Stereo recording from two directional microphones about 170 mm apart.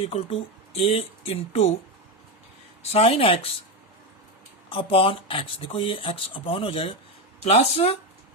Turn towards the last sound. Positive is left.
turn(degrees=40)  # may be behind; listen again after turning